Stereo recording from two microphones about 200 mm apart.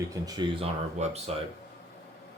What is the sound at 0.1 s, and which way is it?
Speech, 20° right (ahead or behind).